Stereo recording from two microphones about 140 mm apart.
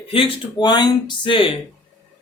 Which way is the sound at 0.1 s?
40° left (ahead or behind).